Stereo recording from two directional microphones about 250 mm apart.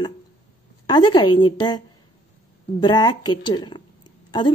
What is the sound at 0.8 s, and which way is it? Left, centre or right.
Speech, centre.